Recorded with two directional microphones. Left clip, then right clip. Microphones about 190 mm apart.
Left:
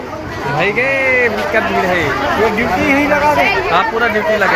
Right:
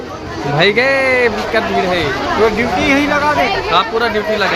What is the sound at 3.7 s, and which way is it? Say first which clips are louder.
Speech: left 1 dB; 10° right (ahead or behind).